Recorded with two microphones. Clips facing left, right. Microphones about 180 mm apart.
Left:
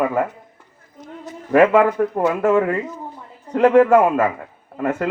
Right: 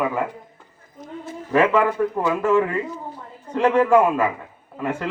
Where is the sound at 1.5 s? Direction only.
55° left (ahead or behind).